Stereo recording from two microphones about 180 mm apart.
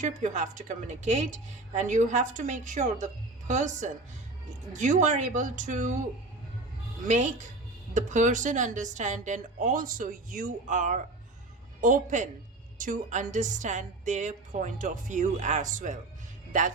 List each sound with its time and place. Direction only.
0.0 s a woman's voice: 40° right (ahead or behind)
7.1 s a woman's voice: 45° right (ahead or behind)